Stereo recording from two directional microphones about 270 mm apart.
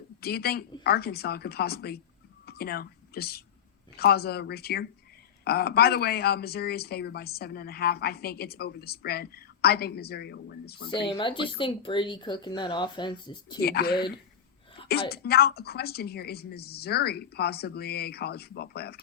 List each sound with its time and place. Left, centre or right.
0.2 s speech: left
11.1 s speech: centre
13.6 s speech: left
15.1 s speech: left